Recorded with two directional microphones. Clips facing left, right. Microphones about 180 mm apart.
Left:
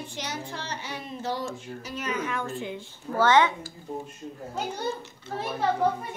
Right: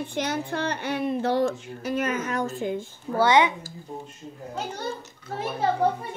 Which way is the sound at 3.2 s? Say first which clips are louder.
Right 1 dB; 15° right (ahead or behind).